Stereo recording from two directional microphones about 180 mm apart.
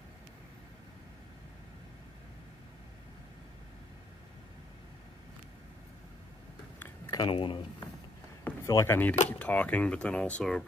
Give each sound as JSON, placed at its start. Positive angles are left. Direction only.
{"t": 7.2, "sound": "speech", "side_deg": 25}
{"t": 8.5, "sound": "speech", "side_deg": 15}